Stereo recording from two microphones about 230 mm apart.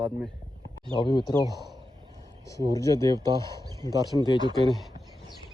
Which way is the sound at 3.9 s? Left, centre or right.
Centre.